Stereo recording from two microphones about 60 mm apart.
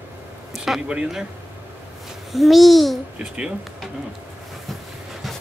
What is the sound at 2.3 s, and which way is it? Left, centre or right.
Speech, centre.